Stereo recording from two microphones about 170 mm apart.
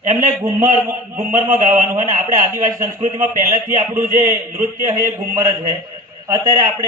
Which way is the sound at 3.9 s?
50° right (ahead or behind).